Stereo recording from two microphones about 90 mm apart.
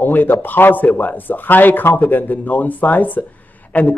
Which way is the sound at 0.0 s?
20° left (ahead or behind).